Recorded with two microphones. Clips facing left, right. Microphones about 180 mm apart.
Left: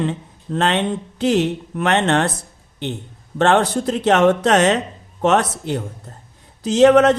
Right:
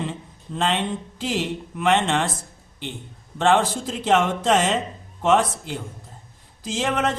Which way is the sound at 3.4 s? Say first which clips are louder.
Left 4 dB; 65° left (ahead or behind).